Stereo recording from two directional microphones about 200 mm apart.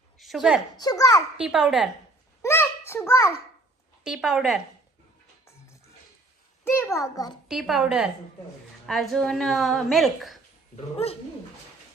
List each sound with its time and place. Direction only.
0.2 s a woman's voice: centre (ahead or behind)
0.8 s a child's voice: 20° left (ahead or behind)
1.4 s a woman's voice: 5° right (ahead or behind)
2.4 s a sound: 10° left (ahead or behind)
4.0 s a woman's voice: 5° right (ahead or behind)
6.9 s a child's voice: 15° left (ahead or behind)
7.4 s a woman's voice: centre (ahead or behind)
10.9 s bird: 30° left (ahead or behind)